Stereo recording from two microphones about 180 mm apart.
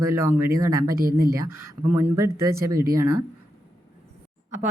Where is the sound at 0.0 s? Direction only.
15° right (ahead or behind).